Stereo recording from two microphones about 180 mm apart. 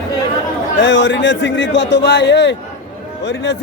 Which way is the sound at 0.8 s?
90° left.